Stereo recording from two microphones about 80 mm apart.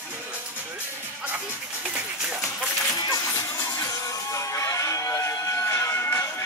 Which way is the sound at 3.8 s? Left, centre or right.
Left.